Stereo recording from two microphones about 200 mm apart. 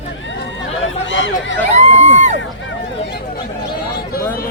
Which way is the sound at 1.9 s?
75° left (ahead or behind).